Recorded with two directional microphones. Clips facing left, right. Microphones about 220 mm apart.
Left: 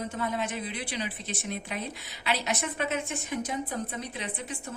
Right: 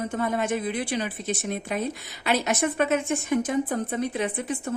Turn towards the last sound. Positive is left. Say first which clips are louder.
# right 9 dB
turn(degrees=-50)  # may be behind; listen again after turning